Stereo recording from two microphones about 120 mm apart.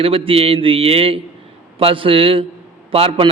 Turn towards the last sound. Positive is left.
turn(degrees=-55)  # may be behind; listen again after turning